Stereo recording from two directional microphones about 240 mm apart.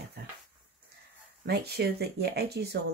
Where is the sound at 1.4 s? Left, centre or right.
Right.